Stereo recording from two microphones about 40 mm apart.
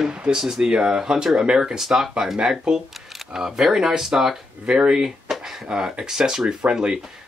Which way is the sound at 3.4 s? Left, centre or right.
Centre.